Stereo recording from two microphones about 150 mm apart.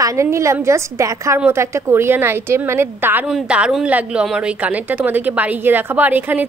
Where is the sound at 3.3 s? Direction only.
5° right (ahead or behind).